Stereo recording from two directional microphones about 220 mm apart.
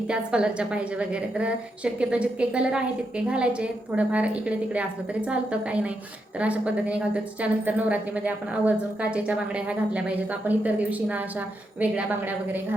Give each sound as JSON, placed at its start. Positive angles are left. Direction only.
{"t": 0.1, "sound": "a woman's voice", "side_deg": -5}